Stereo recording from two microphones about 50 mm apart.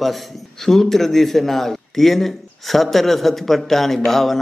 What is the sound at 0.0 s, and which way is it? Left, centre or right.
Speech, centre.